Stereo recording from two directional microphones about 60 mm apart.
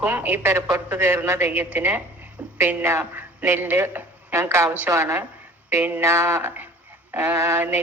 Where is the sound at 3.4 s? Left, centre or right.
Right.